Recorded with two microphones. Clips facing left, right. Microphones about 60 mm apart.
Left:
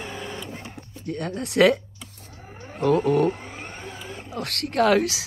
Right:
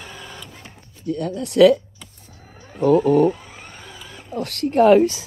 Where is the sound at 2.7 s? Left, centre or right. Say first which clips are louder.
Right 5 dB; left.